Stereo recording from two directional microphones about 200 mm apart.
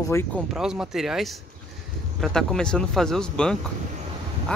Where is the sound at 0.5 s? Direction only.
5° right (ahead or behind).